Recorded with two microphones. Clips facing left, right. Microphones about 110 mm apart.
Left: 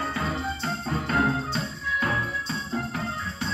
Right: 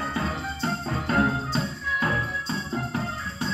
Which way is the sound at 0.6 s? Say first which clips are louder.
Right 1 dB; 30° right (ahead or behind).